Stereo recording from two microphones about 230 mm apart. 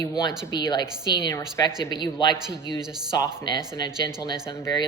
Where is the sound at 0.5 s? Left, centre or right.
Centre.